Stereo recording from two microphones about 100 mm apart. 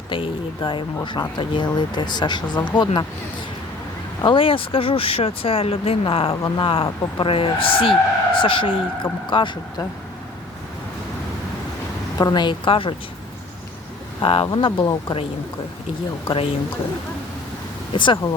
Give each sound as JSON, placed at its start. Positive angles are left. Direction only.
{"t": 0.1, "sound": "speech", "side_deg": 55}
{"t": 4.2, "sound": "speech", "side_deg": 60}
{"t": 12.1, "sound": "speech", "side_deg": 40}
{"t": 14.2, "sound": "speech", "side_deg": 70}
{"t": 14.4, "sound": "speech", "side_deg": 55}
{"t": 16.2, "sound": "speech", "side_deg": 60}
{"t": 17.9, "sound": "speech", "side_deg": 55}